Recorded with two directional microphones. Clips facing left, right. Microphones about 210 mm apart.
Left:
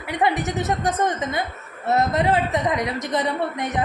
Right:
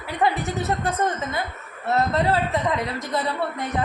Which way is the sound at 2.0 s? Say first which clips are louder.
Left 1 dB; 15° left (ahead or behind).